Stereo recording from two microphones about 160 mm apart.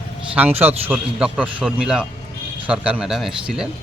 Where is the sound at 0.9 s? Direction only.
5° right (ahead or behind).